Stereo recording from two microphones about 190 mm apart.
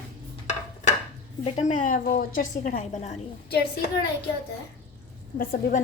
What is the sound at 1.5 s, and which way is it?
A woman's voice, 35° left (ahead or behind).